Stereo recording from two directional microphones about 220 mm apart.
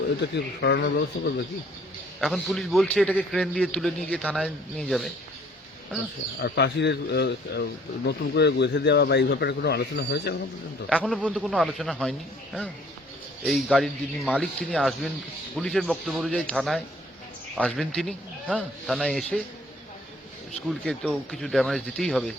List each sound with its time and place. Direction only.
0.2 s speech: 50° left (ahead or behind)
2.2 s a man's voice: centre (ahead or behind)
6.4 s speech: 50° left (ahead or behind)
11.0 s a man's voice: 5° right (ahead or behind)
13.4 s a man's voice: centre (ahead or behind)
20.7 s a man's voice: centre (ahead or behind)